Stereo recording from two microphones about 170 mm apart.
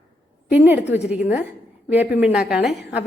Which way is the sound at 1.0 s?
40° left (ahead or behind).